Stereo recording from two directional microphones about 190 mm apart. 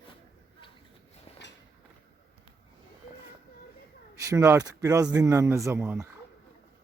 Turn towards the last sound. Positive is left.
turn(degrees=-10)  # may be behind; listen again after turning